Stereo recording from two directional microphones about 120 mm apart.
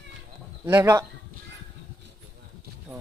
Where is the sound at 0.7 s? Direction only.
20° right (ahead or behind).